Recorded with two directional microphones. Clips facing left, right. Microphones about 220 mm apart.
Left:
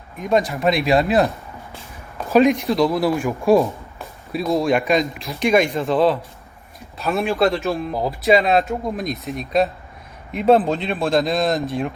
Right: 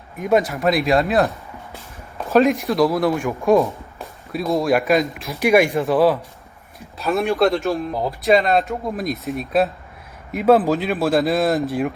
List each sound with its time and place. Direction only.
0.2 s speech: 5° right (ahead or behind)
5.5 s speech: 10° right (ahead or behind)